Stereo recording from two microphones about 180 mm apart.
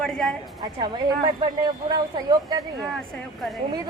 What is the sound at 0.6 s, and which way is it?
Speech, 25° right (ahead or behind).